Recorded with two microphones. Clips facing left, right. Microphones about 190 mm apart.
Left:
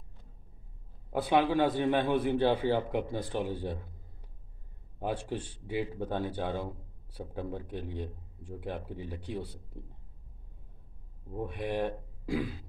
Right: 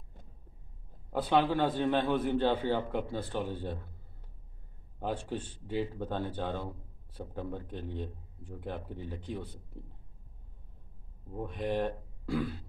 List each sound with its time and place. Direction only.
1.1 s speech: 10° left (ahead or behind)
5.0 s speech: 10° left (ahead or behind)
11.4 s speech: 10° left (ahead or behind)